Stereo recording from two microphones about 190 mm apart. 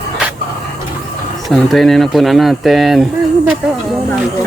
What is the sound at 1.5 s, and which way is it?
Speech, centre (ahead or behind).